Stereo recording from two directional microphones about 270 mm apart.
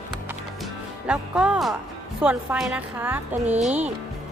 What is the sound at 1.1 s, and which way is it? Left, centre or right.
Speech, centre.